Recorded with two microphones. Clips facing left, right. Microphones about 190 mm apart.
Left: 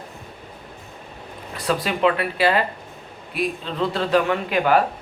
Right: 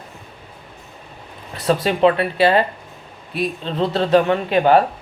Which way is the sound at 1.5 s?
30° right (ahead or behind).